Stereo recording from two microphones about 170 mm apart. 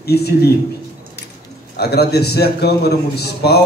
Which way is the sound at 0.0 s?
70° left (ahead or behind).